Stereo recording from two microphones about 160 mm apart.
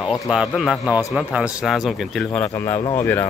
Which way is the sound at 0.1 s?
Centre (ahead or behind).